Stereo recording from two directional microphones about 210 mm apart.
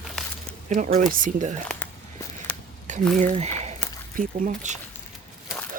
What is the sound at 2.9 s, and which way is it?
Squish, 35° right (ahead or behind).